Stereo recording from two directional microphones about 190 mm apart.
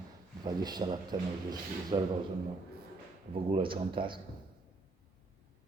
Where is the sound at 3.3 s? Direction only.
30° right (ahead or behind).